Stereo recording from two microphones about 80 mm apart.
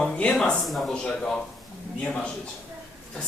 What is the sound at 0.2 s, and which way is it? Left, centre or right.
Speech, centre.